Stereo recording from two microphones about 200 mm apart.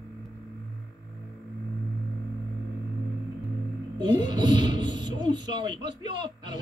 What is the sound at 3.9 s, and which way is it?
Speech, 20° right (ahead or behind).